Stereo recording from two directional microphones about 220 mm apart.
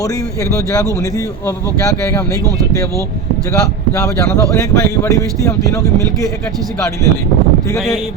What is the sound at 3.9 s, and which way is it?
Speech, 15° left (ahead or behind).